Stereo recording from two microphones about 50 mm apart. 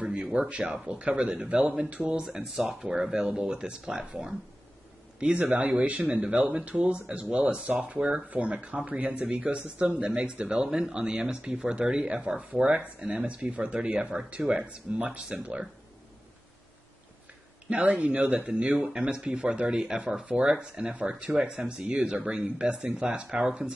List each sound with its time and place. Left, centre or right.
0.0 s speech: centre
2.2 s speech: centre
5.2 s speech: right
14.4 s speech: centre
14.7 s speech: right
15.0 s speech: centre
17.6 s speech: right